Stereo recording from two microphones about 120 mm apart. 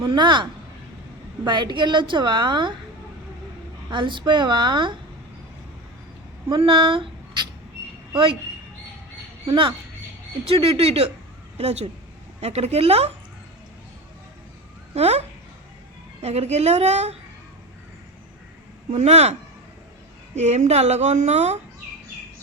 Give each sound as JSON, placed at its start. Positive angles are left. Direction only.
{"t": 0.0, "sound": "a woman's voice", "side_deg": -40}
{"t": 1.5, "sound": "a woman's voice", "side_deg": -40}
{"t": 3.8, "sound": "a woman's voice", "side_deg": -40}
{"t": 6.5, "sound": "speech", "side_deg": -45}
{"t": 9.5, "sound": "a woman's voice", "side_deg": -45}
{"t": 14.9, "sound": "a woman's voice", "side_deg": -65}
{"t": 16.2, "sound": "a woman's voice", "side_deg": -60}
{"t": 18.9, "sound": "a woman's voice", "side_deg": -65}